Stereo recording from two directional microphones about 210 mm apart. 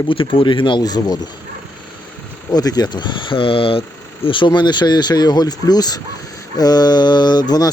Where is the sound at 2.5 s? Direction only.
20° left (ahead or behind).